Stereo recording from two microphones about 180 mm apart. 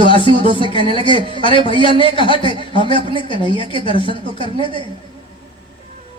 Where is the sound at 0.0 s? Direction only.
30° left (ahead or behind).